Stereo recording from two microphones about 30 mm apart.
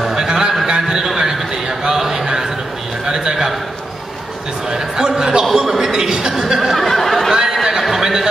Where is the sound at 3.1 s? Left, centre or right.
Right.